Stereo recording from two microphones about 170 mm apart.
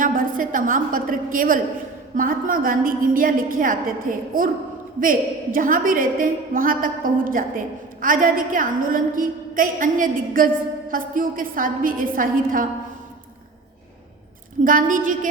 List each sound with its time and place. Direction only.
0.0 s a woman's voice: 55° right (ahead or behind)
14.6 s a woman's voice: 50° right (ahead or behind)